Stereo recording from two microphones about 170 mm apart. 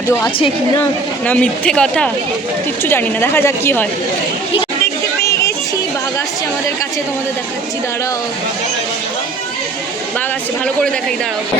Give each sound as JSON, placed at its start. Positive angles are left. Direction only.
{"t": 1.2, "sound": "a woman's voice", "side_deg": 5}
{"t": 5.2, "sound": "music", "side_deg": 15}